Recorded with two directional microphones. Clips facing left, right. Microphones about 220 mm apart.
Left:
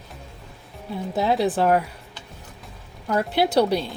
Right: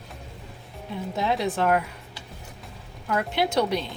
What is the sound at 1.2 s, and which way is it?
Speech, 35° left (ahead or behind).